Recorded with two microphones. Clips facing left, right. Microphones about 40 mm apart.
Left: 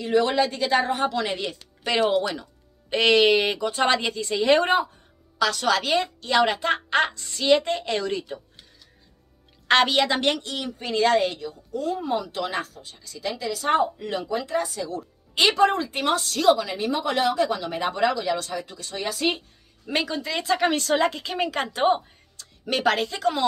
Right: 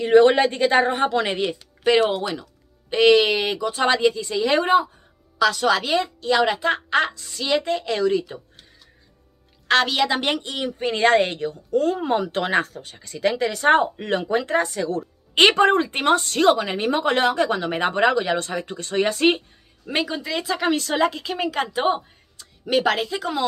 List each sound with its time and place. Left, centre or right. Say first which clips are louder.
0.0 s speech: right 7 dB; right
1.4 s speech: right 8 dB; centre
2.9 s speech: right 2 dB; centre
9.7 s speech: even; centre
10.4 s a woman's voice: right 6 dB; right
19.9 s speech: right 2 dB; centre